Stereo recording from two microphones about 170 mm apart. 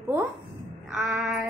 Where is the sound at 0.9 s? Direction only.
5° right (ahead or behind).